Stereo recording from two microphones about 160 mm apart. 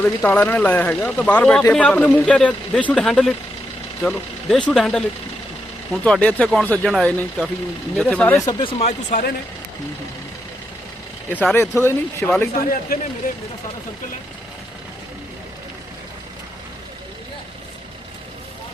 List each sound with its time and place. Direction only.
0.0 s speech: 10° left (ahead or behind)
8.4 s speech: 30° left (ahead or behind)
8.9 s speech: 50° left (ahead or behind)
11.3 s speech: 10° left (ahead or behind)
12.9 s speech: 65° left (ahead or behind)